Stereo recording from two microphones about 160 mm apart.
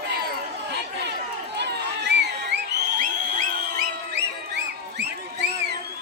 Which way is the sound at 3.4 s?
80° right.